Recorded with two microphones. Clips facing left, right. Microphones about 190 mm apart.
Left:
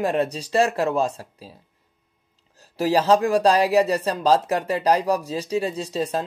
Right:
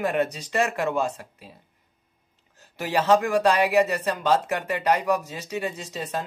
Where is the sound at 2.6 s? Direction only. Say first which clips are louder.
Left 5 dB; 35° left (ahead or behind).